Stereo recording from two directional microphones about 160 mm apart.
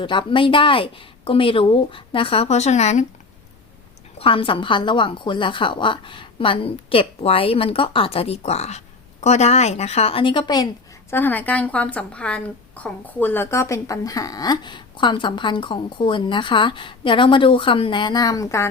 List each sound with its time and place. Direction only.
0.0 s a woman's voice: 30° left (ahead or behind); by 3.1 s 45° left (ahead or behind)
4.2 s a woman's voice: 35° left (ahead or behind)
11.1 s a woman's voice: 10° left (ahead or behind)